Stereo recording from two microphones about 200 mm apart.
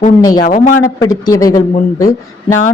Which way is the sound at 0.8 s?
15° left (ahead or behind).